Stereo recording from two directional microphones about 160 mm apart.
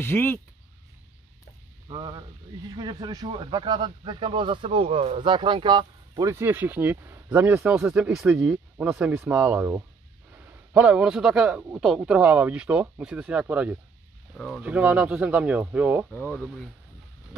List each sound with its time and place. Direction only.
0.0 s speech: 15° left (ahead or behind)
1.9 s speech: 30° right (ahead or behind); by 13.7 s 10° right (ahead or behind)
14.3 s speech: 5° left (ahead or behind)
14.6 s speech: 10° right (ahead or behind)
16.1 s speech: 10° left (ahead or behind)